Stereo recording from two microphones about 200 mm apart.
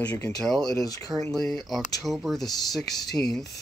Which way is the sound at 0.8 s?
15° left (ahead or behind).